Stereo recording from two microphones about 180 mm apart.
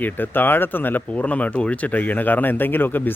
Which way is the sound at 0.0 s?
10° left (ahead or behind).